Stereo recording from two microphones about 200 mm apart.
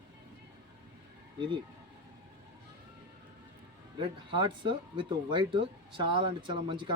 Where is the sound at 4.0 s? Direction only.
20° right (ahead or behind).